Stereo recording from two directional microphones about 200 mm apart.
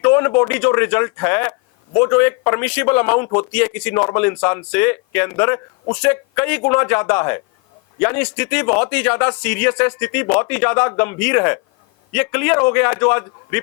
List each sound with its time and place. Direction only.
0.0 s a man's voice: 10° left (ahead or behind)